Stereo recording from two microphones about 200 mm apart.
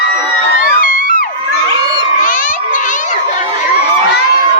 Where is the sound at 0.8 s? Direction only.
45° left (ahead or behind).